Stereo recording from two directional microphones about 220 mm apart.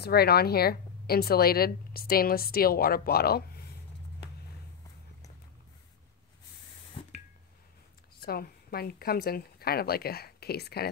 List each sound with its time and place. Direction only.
0.0 s a woman's voice: 45° left (ahead or behind)
8.2 s a woman's voice: 45° left (ahead or behind)